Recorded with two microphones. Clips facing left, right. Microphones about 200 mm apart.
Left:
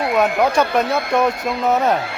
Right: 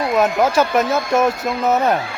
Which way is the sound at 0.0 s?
Centre (ahead or behind).